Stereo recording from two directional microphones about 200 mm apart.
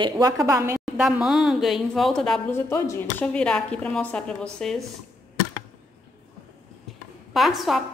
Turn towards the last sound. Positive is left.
turn(degrees=0)  # may be behind; listen again after turning